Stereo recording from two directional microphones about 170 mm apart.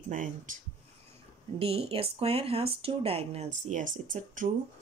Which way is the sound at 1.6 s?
35° right (ahead or behind).